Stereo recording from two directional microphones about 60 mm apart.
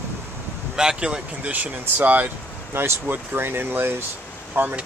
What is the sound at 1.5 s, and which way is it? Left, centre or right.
Speech, right.